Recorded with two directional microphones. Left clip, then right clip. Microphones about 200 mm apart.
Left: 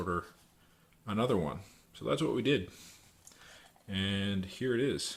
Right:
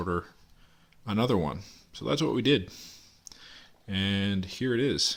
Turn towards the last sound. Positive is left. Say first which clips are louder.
# right 5 dB
turn(degrees=-40)  # may be behind; listen again after turning